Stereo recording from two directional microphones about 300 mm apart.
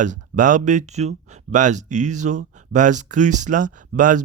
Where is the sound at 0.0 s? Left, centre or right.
Right.